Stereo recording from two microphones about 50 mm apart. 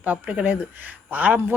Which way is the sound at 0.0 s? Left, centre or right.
Right.